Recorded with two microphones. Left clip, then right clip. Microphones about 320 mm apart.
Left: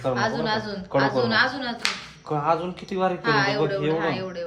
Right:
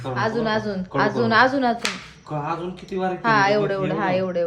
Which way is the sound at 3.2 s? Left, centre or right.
Centre.